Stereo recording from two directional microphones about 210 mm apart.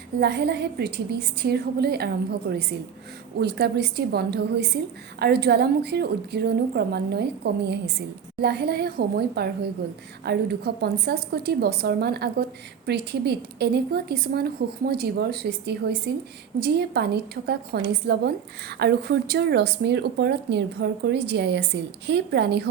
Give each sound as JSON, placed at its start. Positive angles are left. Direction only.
{"t": 0.2, "sound": "a woman's voice", "side_deg": -50}
{"t": 3.3, "sound": "a woman's voice", "side_deg": -50}